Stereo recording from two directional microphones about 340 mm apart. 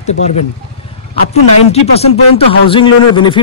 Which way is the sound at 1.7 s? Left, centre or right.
Centre.